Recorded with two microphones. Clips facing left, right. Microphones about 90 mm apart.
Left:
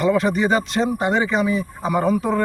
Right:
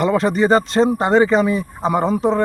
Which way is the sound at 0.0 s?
35° right (ahead or behind).